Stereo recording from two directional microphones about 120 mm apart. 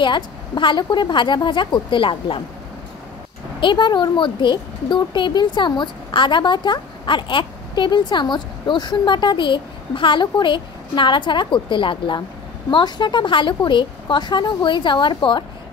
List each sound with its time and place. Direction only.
0.0 s speech: 40° left (ahead or behind)
3.6 s speech: 40° left (ahead or behind)